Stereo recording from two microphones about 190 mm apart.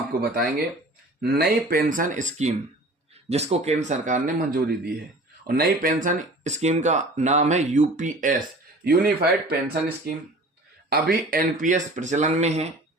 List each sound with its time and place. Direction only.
0.2 s speech: 55° right (ahead or behind)
10.8 s speech: 55° right (ahead or behind); by 12.6 s 35° right (ahead or behind)